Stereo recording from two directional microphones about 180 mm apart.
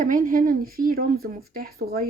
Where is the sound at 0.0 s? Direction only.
50° right (ahead or behind).